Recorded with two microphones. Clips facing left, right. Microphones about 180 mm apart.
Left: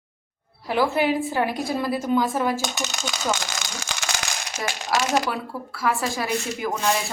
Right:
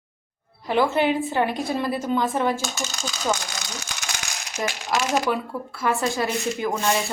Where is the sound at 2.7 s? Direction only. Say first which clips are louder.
Left 1 dB; 80° left.